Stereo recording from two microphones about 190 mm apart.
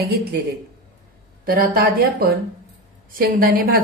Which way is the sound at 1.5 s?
50° right (ahead or behind).